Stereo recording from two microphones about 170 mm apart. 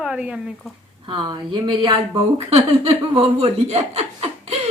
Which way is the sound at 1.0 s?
25° right (ahead or behind).